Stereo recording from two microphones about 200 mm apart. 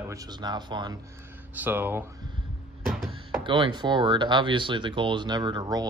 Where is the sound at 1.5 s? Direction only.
10° right (ahead or behind).